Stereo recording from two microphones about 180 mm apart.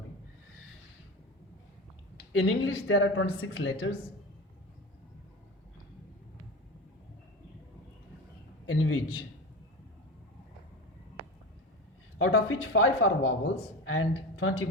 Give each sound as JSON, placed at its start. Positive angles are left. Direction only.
{"t": 2.1, "sound": "speech", "side_deg": 90}
{"t": 8.6, "sound": "a man's voice", "side_deg": 90}
{"t": 12.2, "sound": "speech", "side_deg": 90}